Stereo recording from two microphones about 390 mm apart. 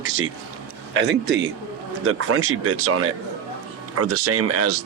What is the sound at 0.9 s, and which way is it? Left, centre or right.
Speech, right.